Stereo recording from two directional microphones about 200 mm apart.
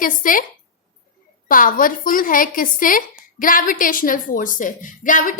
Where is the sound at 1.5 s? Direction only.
45° left (ahead or behind).